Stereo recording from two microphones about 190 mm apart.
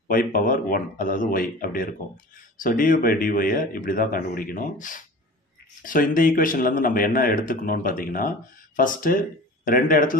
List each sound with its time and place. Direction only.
0.1 s speech: 45° left (ahead or behind)